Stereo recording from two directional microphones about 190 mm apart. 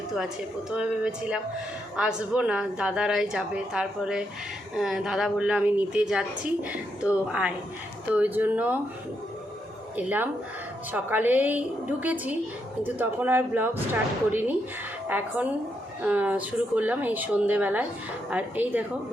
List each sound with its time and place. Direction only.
0.7 s a woman's voice: 5° right (ahead or behind)
10.9 s speech: 10° right (ahead or behind)